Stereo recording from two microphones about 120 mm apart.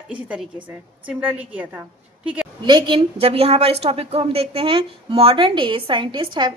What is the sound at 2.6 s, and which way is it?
A woman's voice, 40° right (ahead or behind).